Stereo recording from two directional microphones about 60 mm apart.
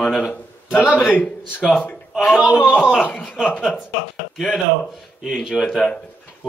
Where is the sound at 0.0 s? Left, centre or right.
Centre.